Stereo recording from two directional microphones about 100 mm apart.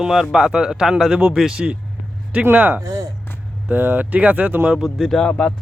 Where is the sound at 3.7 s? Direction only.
20° right (ahead or behind).